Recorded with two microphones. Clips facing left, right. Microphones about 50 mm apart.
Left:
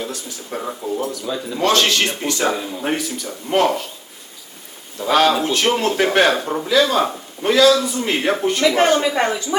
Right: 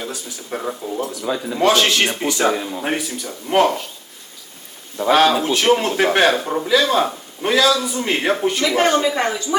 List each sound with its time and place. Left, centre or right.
0.0 s a man's voice: centre
1.2 s a man's voice: centre
4.9 s a man's voice: centre
8.6 s speech: left